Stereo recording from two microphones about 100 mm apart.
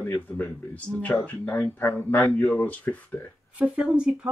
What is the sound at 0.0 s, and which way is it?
Speech, 15° left (ahead or behind).